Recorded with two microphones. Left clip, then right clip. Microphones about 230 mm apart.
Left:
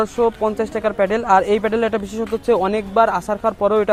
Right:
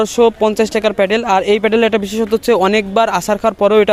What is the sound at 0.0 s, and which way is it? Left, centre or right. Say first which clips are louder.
Speech: right 6 dB; right.